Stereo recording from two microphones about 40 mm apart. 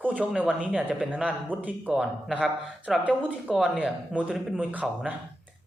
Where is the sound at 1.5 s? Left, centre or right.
Right.